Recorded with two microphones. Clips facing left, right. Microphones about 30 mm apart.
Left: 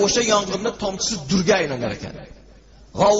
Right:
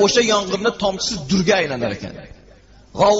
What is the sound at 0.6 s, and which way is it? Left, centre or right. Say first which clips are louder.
Speech: right 5 dB; right.